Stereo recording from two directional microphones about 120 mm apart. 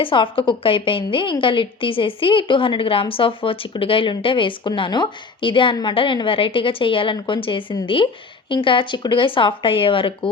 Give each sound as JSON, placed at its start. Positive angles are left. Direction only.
{"t": 0.0, "sound": "a woman's voice", "side_deg": 45}